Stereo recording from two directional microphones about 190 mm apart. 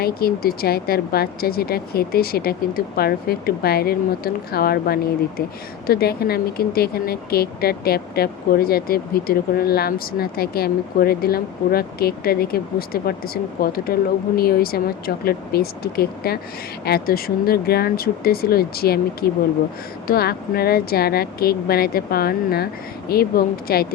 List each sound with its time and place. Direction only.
0.0 s speech: 55° left (ahead or behind)